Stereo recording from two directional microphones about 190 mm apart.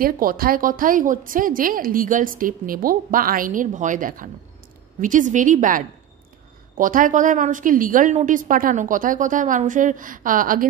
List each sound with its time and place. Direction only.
0.0 s a woman's voice: 50° right (ahead or behind)